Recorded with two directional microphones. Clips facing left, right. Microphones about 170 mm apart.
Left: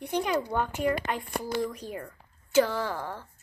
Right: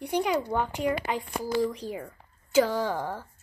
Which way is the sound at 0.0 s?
15° right (ahead or behind).